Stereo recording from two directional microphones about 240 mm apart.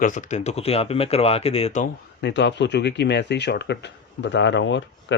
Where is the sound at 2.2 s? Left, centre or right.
Left.